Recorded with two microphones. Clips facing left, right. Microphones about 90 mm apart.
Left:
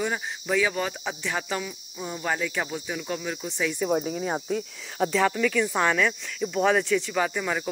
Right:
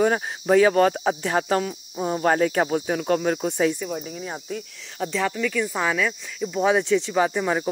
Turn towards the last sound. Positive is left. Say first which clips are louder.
# right 5 dB
turn(degrees=-25)  # may be behind; listen again after turning